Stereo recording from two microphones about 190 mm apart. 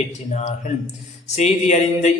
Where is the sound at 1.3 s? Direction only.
35° left (ahead or behind).